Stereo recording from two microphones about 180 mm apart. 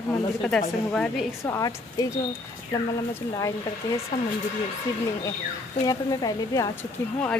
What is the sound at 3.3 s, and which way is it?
Speech, 20° left (ahead or behind).